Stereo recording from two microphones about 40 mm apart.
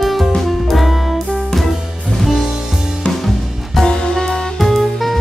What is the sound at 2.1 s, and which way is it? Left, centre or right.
Music, centre.